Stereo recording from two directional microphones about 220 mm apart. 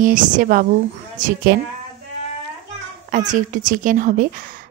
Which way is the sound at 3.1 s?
35° right (ahead or behind).